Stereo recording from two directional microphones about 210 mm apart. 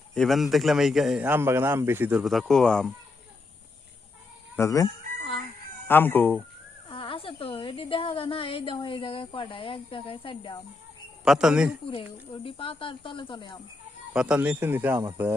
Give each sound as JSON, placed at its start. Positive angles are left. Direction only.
{"t": 0.1, "sound": "a man's voice", "side_deg": 0}
{"t": 4.5, "sound": "chicken", "side_deg": 15}
{"t": 5.9, "sound": "speech", "side_deg": 10}
{"t": 6.8, "sound": "a woman's voice", "side_deg": 25}
{"t": 11.3, "sound": "a man's voice", "side_deg": -5}
{"t": 12.4, "sound": "a woman's voice", "side_deg": 25}
{"t": 14.1, "sound": "speech", "side_deg": -5}